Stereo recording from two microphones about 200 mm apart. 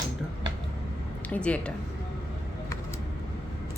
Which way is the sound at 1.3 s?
5° left (ahead or behind).